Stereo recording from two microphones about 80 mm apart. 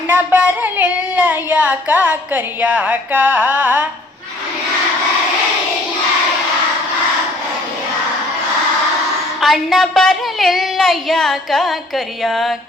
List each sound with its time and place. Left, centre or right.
0.1 s child singing: centre
9.4 s a woman's voice: centre